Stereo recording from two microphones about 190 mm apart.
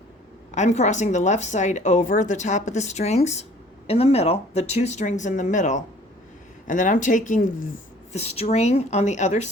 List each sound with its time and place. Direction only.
0.5 s a woman's voice: 35° left (ahead or behind)